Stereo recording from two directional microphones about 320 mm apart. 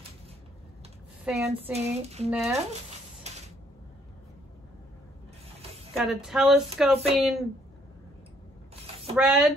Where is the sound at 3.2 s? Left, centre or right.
Right.